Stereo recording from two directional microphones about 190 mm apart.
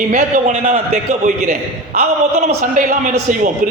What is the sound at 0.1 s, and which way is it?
A man's voice, 40° right (ahead or behind).